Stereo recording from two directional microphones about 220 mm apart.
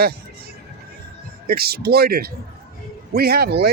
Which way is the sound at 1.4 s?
45° right (ahead or behind).